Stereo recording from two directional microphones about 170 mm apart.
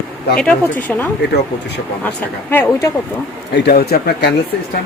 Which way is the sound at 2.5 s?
10° left (ahead or behind).